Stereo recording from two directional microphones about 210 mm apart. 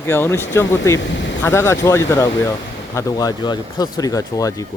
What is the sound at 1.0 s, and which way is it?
Speech, 60° left (ahead or behind).